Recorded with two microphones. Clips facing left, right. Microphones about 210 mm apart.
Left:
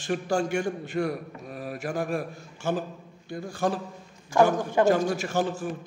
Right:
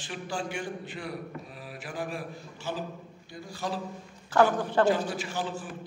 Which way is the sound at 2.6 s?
50° left (ahead or behind).